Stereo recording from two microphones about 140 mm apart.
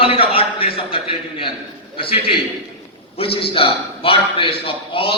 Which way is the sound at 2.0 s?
40° left (ahead or behind).